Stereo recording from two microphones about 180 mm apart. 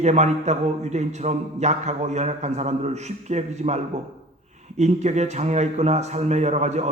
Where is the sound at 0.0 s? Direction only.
40° right (ahead or behind).